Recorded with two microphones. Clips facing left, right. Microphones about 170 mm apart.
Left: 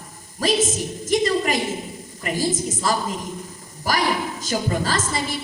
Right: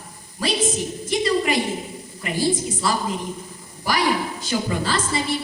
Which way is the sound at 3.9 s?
40° left (ahead or behind).